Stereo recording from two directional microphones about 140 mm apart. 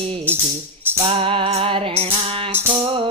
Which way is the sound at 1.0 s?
40° right (ahead or behind).